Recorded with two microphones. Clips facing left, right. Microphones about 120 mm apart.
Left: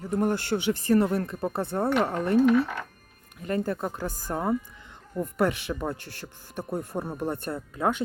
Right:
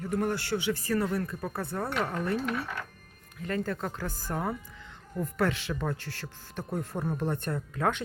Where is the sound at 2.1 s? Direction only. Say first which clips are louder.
Left 7 dB; 40° left (ahead or behind).